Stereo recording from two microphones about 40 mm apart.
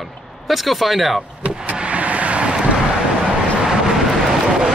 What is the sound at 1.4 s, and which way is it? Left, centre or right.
Vehicle, right.